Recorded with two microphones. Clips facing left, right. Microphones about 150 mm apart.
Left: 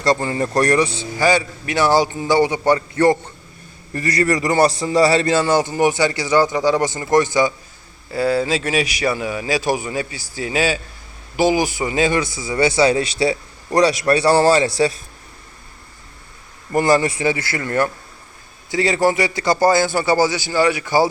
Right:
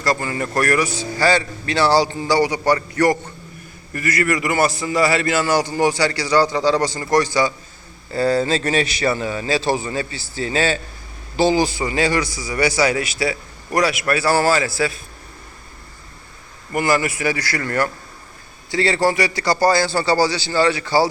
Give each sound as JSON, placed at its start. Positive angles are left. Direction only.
{"t": 0.0, "sound": "a man's voice", "side_deg": 30}
{"t": 0.9, "sound": "a man's voice", "side_deg": 15}
{"t": 8.1, "sound": "a man's voice", "side_deg": 10}
{"t": 16.7, "sound": "a man's voice", "side_deg": 30}